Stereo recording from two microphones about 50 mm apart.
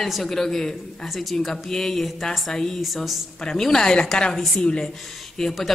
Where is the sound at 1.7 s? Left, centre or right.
Centre.